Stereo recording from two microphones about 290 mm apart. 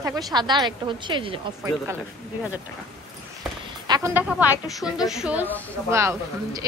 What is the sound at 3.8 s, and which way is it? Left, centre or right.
A woman's voice, centre.